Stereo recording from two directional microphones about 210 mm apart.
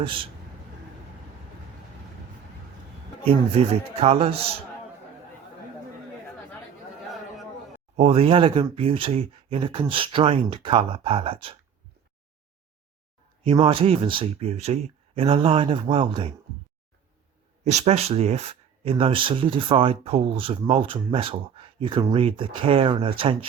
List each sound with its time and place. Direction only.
0.0 s speech: 25° right (ahead or behind)
3.9 s speech: 30° right (ahead or behind)
7.9 s speech: 30° right (ahead or behind)
13.4 s speech: 30° right (ahead or behind)
17.6 s speech: 30° right (ahead or behind)